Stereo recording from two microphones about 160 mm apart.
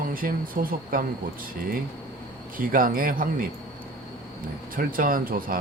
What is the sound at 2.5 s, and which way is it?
Speech, 60° right (ahead or behind).